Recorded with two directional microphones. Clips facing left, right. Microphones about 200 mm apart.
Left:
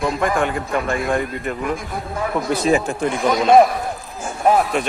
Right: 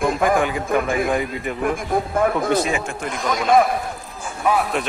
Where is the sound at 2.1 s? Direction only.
50° right (ahead or behind).